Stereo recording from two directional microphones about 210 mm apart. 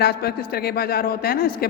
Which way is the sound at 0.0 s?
50° left (ahead or behind).